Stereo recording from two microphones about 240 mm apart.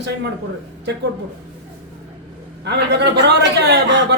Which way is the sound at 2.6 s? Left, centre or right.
Right.